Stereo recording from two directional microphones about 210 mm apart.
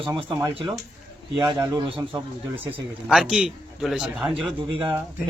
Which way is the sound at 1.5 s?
20° right (ahead or behind).